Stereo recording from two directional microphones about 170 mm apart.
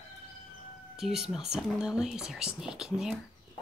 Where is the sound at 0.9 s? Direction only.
5° right (ahead or behind).